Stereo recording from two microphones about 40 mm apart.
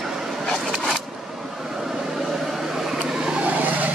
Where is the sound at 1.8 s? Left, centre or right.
Centre.